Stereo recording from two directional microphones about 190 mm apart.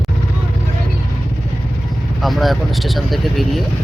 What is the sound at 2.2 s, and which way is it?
Speech, centre (ahead or behind).